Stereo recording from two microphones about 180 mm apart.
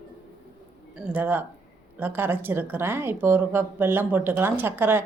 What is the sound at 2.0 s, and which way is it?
A woman's voice, 10° right (ahead or behind).